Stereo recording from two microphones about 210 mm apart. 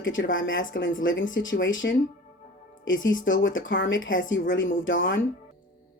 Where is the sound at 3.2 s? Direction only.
65° left (ahead or behind).